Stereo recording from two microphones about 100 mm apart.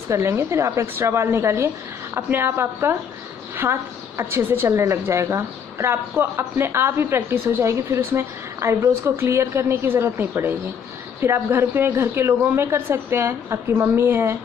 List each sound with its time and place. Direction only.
0.1 s a woman's voice: 25° right (ahead or behind)